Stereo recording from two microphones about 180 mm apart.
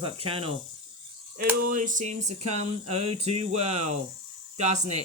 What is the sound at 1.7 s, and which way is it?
Speech, 45° right (ahead or behind).